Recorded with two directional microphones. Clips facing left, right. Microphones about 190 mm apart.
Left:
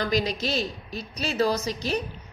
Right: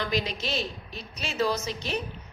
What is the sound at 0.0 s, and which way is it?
A woman's voice, 40° left (ahead or behind).